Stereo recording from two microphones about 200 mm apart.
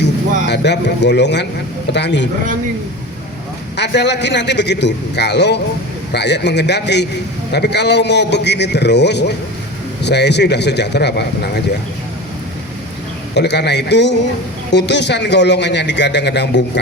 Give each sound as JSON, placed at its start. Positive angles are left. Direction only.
{"t": 0.4, "sound": "a man's voice", "side_deg": 60}
{"t": 3.8, "sound": "a man's voice", "side_deg": 60}
{"t": 13.3, "sound": "a man's voice", "side_deg": 55}